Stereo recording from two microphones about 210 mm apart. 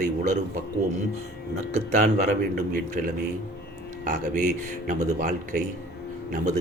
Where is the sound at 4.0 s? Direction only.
35° right (ahead or behind).